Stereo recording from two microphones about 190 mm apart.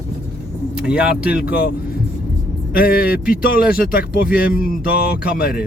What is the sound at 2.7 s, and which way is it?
Speech, 50° left (ahead or behind).